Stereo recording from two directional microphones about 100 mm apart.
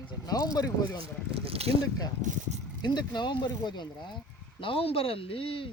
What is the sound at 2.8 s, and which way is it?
Speech, 45° left (ahead or behind).